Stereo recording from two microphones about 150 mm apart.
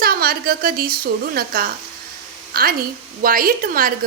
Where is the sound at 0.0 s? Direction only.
85° right.